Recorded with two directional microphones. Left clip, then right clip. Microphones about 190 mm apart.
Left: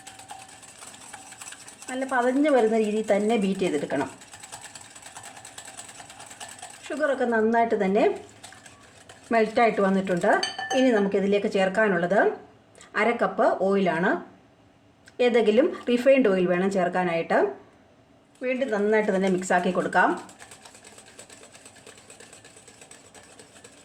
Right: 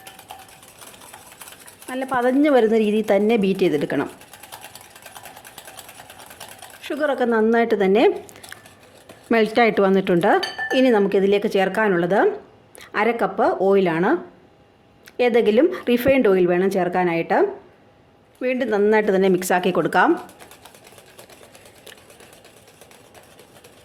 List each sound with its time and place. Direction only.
1.9 s speech: 50° right (ahead or behind)
6.8 s speech: 40° right (ahead or behind)
9.3 s speech: 60° right (ahead or behind); by 14.2 s 40° right (ahead or behind)
15.2 s speech: 40° right (ahead or behind)
18.4 s speech: 65° right (ahead or behind)